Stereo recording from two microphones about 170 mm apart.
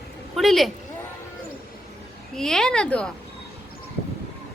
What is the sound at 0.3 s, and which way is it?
Speech, centre (ahead or behind).